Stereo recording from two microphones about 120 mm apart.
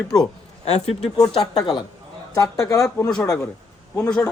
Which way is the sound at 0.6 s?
65° left (ahead or behind).